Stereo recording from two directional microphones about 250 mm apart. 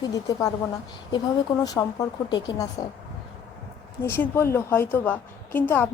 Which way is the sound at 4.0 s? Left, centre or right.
Centre.